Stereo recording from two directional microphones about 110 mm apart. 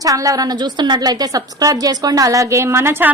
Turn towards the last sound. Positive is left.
turn(degrees=-20)  # may be behind; listen again after turning